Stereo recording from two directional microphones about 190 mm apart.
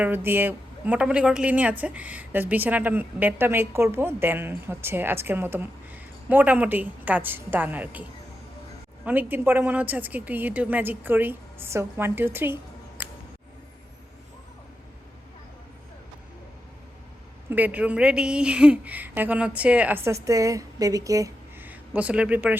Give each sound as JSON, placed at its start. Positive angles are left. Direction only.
{"t": 0.0, "sound": "speech", "side_deg": -10}
{"t": 9.0, "sound": "speech", "side_deg": -10}
{"t": 17.5, "sound": "a woman's voice", "side_deg": -10}